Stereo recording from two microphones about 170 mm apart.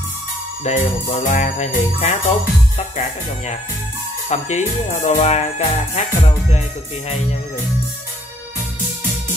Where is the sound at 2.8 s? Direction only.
40° left (ahead or behind).